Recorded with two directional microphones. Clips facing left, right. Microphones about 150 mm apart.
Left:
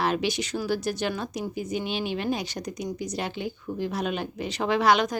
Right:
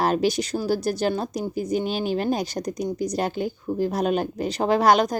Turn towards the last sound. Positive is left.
turn(degrees=-40)  # may be behind; listen again after turning